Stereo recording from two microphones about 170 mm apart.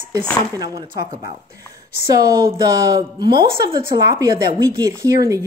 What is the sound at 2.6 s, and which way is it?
Speech, 25° right (ahead or behind).